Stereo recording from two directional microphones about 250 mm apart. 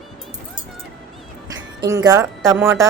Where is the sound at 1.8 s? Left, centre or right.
Centre.